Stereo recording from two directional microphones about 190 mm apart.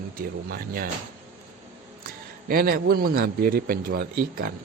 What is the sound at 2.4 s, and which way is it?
Speech, 50° right (ahead or behind).